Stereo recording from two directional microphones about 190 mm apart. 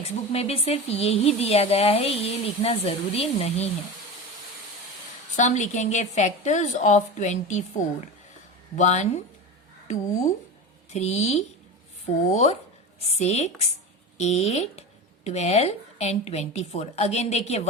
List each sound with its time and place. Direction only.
0.0 s speech: 30° left (ahead or behind)
5.4 s speech: 40° left (ahead or behind)